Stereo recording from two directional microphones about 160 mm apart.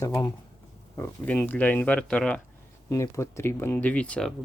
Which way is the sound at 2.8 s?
20° left (ahead or behind).